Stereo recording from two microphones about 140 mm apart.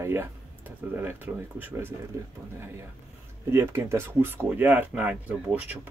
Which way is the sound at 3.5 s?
20° right (ahead or behind).